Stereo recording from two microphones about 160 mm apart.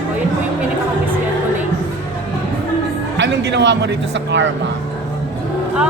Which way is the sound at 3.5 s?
90° right.